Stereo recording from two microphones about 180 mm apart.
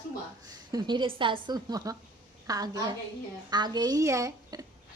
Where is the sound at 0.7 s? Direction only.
25° right (ahead or behind).